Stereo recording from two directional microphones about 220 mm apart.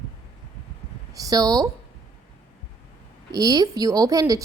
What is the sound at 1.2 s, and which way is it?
Speech, 15° right (ahead or behind).